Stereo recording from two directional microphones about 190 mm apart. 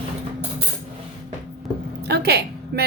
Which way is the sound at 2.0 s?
60° right (ahead or behind).